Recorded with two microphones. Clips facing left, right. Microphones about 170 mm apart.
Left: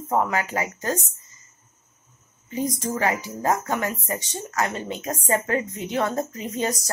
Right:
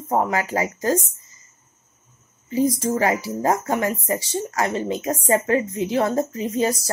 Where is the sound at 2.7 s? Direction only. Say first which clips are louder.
Right 4 dB; 35° right (ahead or behind).